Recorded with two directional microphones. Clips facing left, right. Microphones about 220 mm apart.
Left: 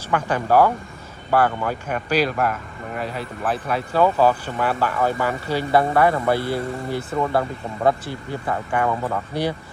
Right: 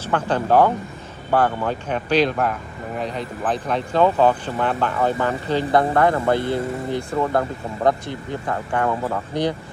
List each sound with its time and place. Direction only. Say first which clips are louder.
0.0 s speech: right 1 dB; 10° left (ahead or behind)
6.3 s speech: right 2 dB; 20° right (ahead or behind)
7.0 s speech: even; 5° left (ahead or behind)